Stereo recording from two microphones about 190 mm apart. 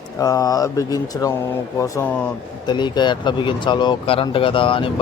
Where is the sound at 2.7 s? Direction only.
25° left (ahead or behind).